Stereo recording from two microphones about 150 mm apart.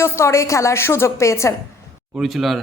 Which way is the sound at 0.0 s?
15° left (ahead or behind).